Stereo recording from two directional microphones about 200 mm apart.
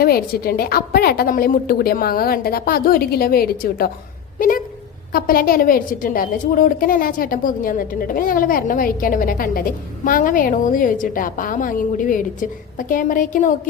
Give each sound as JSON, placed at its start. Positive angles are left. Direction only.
{"t": 0.0, "sound": "a woman's voice", "side_deg": 50}
{"t": 4.4, "sound": "a sound", "side_deg": 45}
{"t": 5.1, "sound": "a woman's voice", "side_deg": 45}